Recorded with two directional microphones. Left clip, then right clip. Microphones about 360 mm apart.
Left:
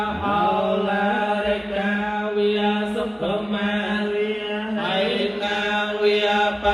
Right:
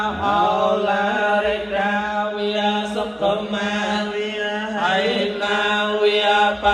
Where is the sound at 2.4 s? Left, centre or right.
Right.